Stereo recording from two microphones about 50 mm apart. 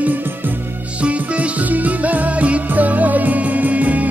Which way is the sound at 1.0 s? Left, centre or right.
Right.